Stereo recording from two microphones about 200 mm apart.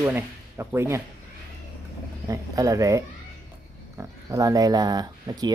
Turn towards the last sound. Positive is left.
turn(degrees=-20)  # may be behind; listen again after turning